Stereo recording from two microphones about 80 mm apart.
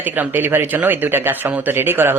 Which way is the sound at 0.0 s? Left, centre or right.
Right.